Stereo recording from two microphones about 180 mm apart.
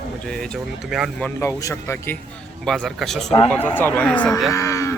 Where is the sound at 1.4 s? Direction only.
15° left (ahead or behind).